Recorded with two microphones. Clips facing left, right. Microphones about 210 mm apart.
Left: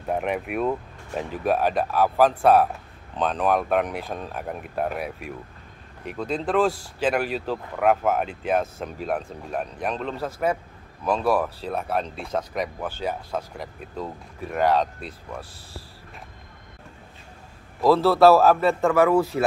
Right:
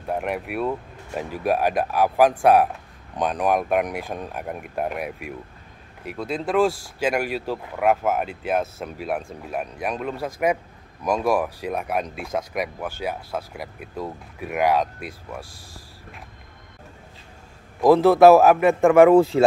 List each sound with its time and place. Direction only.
0.1 s speech: 5° right (ahead or behind)
17.7 s speech: 20° right (ahead or behind)